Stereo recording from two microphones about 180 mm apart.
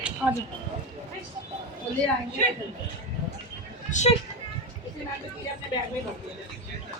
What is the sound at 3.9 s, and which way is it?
Speech, 40° left (ahead or behind).